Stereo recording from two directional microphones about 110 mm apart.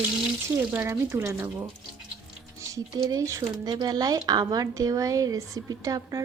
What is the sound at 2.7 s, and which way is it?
Speech, 30° right (ahead or behind).